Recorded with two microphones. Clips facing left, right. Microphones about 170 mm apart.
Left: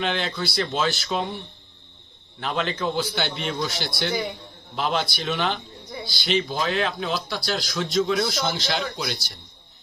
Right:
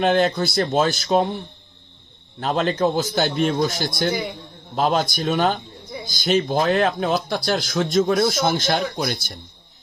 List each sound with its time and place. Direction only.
0.0 s speech: 45° right (ahead or behind)
2.4 s speech: 40° right (ahead or behind)